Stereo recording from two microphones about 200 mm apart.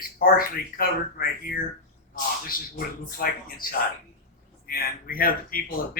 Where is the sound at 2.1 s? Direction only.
45° left (ahead or behind).